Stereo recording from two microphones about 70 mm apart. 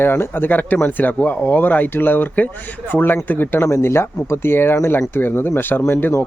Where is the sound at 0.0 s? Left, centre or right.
Left.